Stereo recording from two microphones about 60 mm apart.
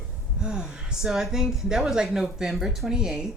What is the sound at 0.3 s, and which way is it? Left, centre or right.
Speech, centre.